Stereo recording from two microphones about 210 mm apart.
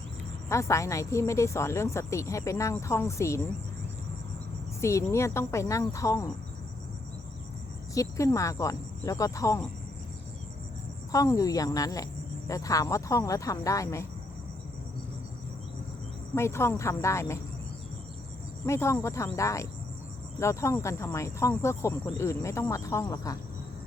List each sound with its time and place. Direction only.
0.4 s speech: 15° left (ahead or behind)
4.8 s speech: 15° left (ahead or behind)
7.9 s speech: 15° left (ahead or behind)
11.1 s speech: 15° left (ahead or behind)
16.3 s speech: 10° left (ahead or behind)
18.6 s speech: 15° left (ahead or behind)